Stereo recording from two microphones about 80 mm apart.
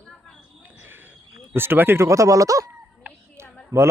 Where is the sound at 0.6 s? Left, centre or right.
Right.